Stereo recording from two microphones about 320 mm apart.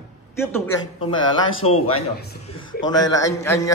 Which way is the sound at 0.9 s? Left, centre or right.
Left.